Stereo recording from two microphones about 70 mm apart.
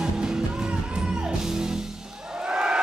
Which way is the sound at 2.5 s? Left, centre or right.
Centre.